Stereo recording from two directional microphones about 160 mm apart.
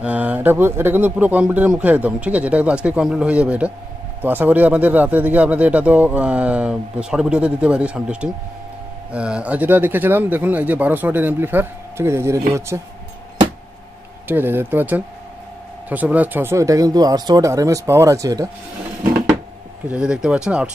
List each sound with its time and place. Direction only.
0.0 s speech: 10° right (ahead or behind)
14.2 s speech: 10° right (ahead or behind)
19.9 s speech: 5° right (ahead or behind)